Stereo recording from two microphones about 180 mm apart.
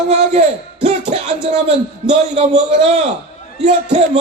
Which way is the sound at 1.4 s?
35° right (ahead or behind).